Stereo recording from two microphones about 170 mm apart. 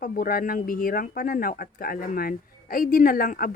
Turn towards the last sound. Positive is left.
turn(degrees=55)  # may be behind; listen again after turning